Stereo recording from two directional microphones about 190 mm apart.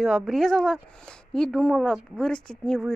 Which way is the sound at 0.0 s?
Centre (ahead or behind).